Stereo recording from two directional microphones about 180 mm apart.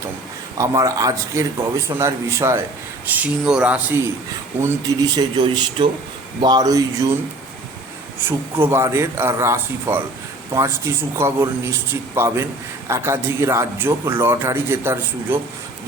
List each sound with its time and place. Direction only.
0.6 s a man's voice: 20° right (ahead or behind)
5.8 s speech: 25° right (ahead or behind)
8.2 s a man's voice: 10° right (ahead or behind)